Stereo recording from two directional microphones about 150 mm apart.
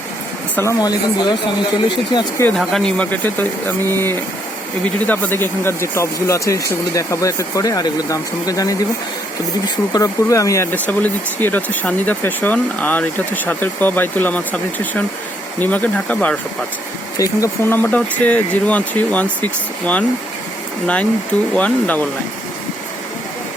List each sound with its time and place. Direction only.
0.5 s speech: 20° left (ahead or behind)
2.6 s speech: 5° left (ahead or behind)